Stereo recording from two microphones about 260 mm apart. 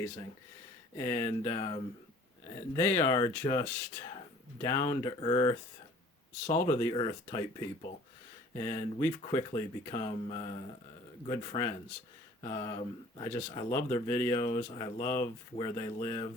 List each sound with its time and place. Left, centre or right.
0.9 s speech: centre
6.7 s speech: centre
14.4 s speech: left
15.0 s speech: centre